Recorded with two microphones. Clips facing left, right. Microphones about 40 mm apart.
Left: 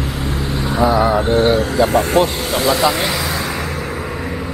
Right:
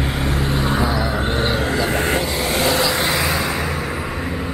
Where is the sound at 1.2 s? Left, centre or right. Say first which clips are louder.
Left 6 dB; right.